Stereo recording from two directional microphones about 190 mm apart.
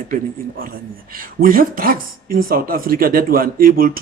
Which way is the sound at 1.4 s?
50° right (ahead or behind).